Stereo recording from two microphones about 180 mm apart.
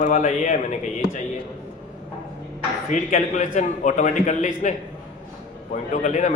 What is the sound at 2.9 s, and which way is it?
A man's voice, 45° left (ahead or behind).